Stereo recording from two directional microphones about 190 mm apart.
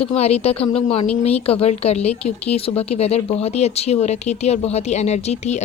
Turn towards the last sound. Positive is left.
turn(degrees=35)  # may be behind; listen again after turning